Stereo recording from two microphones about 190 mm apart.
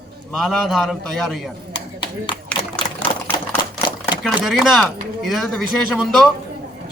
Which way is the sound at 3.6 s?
25° left (ahead or behind).